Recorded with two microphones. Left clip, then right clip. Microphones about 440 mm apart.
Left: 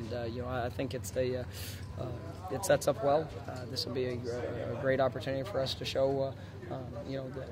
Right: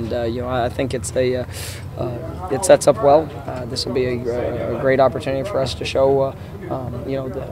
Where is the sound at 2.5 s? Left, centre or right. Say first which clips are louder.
Right 16 dB; right.